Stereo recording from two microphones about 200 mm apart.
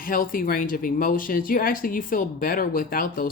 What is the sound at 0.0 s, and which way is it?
Speech, 45° left (ahead or behind).